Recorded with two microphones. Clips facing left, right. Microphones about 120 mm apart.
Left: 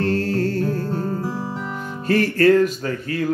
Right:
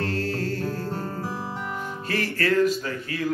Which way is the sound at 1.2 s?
10° right (ahead or behind).